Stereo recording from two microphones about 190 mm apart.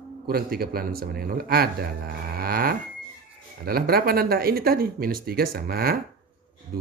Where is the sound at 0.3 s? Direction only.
55° right (ahead or behind).